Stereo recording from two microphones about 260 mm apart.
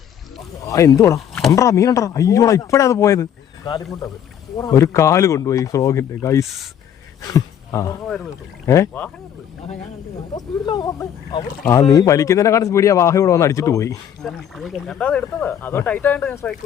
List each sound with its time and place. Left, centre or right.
0.7 s speech: centre
4.5 s speech: centre
8.0 s speech: centre
10.3 s speech: centre
14.3 s speech: centre